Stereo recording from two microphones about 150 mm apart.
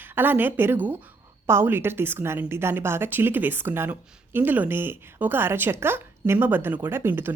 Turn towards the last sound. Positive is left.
turn(degrees=-15)  # may be behind; listen again after turning